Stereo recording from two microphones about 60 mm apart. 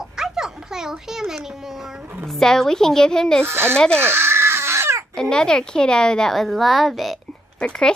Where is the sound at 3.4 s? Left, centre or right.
Right.